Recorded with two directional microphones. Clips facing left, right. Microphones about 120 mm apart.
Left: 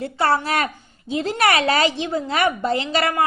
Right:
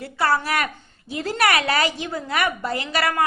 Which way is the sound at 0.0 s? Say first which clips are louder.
Left 2 dB; 25° left (ahead or behind).